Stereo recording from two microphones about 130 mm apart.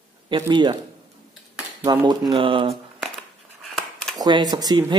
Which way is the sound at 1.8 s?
30° right (ahead or behind).